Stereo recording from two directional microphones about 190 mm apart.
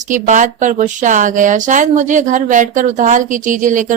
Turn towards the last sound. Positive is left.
turn(degrees=-45)  # may be behind; listen again after turning